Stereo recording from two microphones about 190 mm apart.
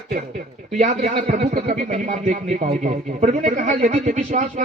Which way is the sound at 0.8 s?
35° right (ahead or behind).